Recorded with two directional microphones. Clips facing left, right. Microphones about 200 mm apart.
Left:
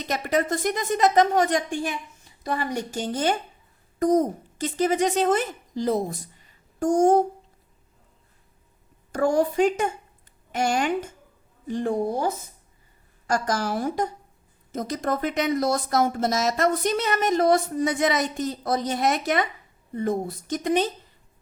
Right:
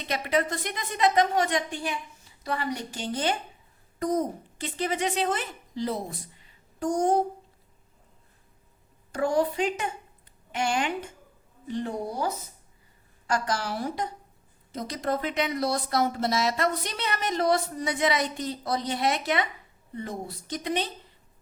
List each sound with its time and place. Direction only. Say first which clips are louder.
0.0 s speech: left 2 dB; 45° left (ahead or behind)
9.1 s speech: left 4 dB; 45° left (ahead or behind)